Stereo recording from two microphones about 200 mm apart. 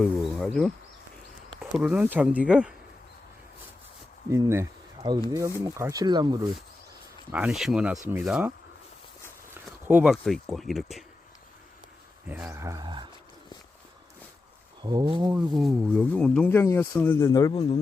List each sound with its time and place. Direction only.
0.0 s speech: centre (ahead or behind)
4.3 s speech: 15° right (ahead or behind)
7.3 s speech: 5° right (ahead or behind)
9.6 s speech: 10° right (ahead or behind)
12.3 s speech: 10° right (ahead or behind)
14.8 s speech: 20° right (ahead or behind)
15.3 s speech: 5° right (ahead or behind); by 17.5 s 15° left (ahead or behind)
17.5 s a man's voice: 30° left (ahead or behind)